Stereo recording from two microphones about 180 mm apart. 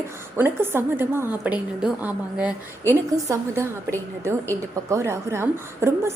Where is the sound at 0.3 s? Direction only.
10° right (ahead or behind).